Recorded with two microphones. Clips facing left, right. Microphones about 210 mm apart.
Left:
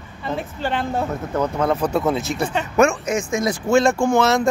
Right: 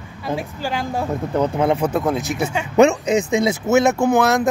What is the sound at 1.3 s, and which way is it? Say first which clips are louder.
Speech: right 2 dB; 15° right (ahead or behind).